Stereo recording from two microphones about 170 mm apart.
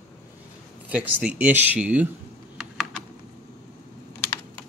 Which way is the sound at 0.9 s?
10° right (ahead or behind).